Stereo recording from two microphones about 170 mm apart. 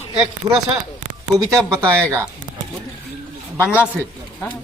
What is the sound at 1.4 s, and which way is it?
Speech, 20° right (ahead or behind).